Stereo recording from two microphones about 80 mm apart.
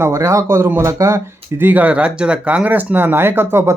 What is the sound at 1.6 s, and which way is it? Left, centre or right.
Speech, centre.